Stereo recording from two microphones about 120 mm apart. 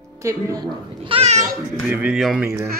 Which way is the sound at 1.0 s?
50° right (ahead or behind).